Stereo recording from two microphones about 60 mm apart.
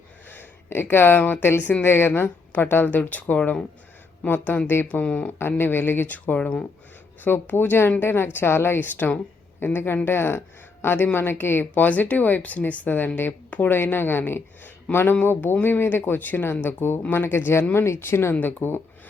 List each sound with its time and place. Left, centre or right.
0.3 s speech: left
4.9 s speech: left
5.4 s speech: left
6.2 s speech: left
7.3 s speech: left